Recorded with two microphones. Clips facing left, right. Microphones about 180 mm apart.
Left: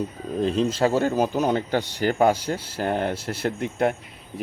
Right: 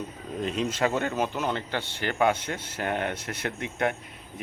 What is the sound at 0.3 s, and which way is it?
Speech, 30° left (ahead or behind).